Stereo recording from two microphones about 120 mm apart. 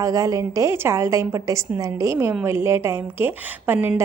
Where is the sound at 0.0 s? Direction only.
25° right (ahead or behind).